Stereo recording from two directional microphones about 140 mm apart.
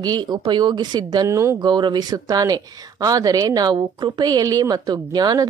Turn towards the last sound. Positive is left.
turn(degrees=-30)  # may be behind; listen again after turning